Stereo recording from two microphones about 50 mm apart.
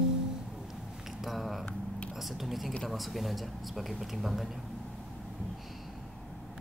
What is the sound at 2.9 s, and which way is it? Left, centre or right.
Speech, centre.